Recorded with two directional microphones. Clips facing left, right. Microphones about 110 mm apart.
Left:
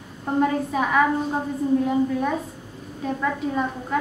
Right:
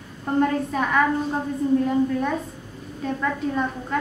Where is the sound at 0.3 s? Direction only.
5° left (ahead or behind).